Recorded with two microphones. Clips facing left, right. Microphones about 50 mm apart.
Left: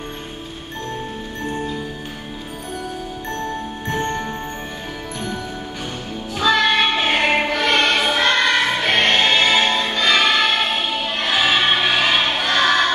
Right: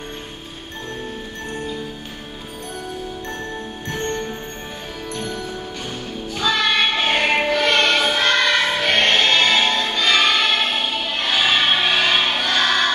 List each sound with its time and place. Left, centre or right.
1.4 s music: centre
3.8 s music: centre
6.4 s music: centre